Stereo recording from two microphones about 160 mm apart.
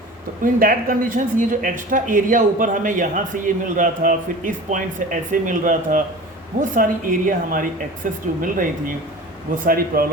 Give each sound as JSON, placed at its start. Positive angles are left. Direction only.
{"t": 0.4, "sound": "speech", "side_deg": -60}
{"t": 9.6, "sound": "speech", "side_deg": -65}